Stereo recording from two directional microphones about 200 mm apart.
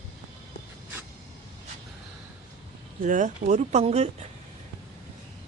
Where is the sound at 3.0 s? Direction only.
40° right (ahead or behind).